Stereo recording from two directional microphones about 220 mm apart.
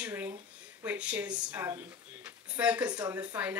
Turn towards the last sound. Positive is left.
turn(degrees=-5)  # may be behind; listen again after turning